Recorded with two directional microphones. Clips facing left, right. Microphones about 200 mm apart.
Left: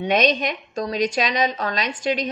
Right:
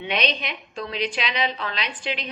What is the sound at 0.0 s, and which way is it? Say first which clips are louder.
A woman's voice: left 7 dB; 45° left (ahead or behind).